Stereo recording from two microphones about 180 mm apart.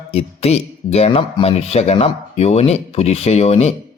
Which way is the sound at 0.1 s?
35° left (ahead or behind).